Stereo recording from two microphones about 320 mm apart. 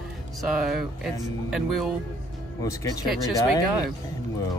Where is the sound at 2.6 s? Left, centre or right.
Centre.